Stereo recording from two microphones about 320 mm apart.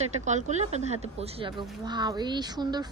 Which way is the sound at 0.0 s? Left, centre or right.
Right.